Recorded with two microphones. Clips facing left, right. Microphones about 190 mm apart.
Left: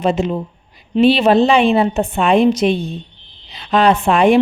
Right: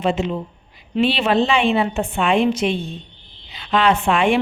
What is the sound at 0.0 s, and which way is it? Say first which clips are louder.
A woman's voice: left 4 dB; 40° left (ahead or behind).